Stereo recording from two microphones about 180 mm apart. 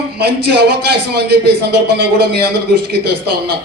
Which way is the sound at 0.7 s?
65° right (ahead or behind).